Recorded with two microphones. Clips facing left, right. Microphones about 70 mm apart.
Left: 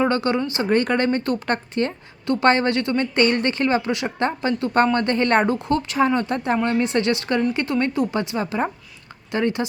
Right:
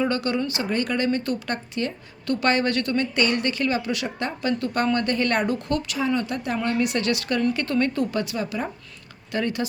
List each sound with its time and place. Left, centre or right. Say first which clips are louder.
0.0 s speech: left 4 dB; left
2.2 s speech: left 4 dB; left
3.2 s speech: left 6 dB; left
6.0 s speech: left 5 dB; left